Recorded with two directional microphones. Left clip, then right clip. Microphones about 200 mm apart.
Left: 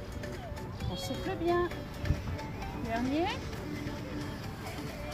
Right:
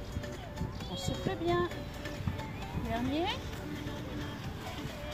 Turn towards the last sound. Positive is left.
turn(degrees=20)  # may be behind; listen again after turning